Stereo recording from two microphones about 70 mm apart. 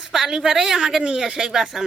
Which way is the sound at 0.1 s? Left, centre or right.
Centre.